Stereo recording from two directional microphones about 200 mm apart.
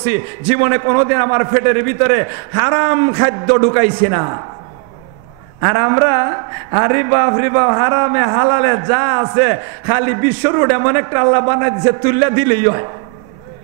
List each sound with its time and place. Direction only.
0.0 s speech: 10° right (ahead or behind)
5.6 s speech: 20° right (ahead or behind)